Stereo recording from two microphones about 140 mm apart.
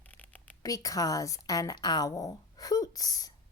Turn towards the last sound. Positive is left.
turn(degrees=25)  # may be behind; listen again after turning